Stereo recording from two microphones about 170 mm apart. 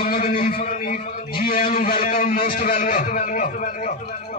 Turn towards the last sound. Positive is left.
turn(degrees=50)  # may be behind; listen again after turning